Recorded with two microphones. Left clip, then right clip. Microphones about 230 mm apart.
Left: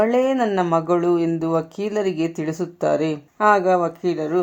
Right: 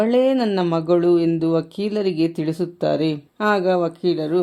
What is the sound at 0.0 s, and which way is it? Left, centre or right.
Speech, right.